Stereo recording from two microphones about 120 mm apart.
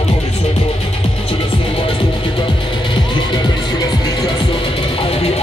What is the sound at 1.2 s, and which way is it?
Music, 50° left (ahead or behind).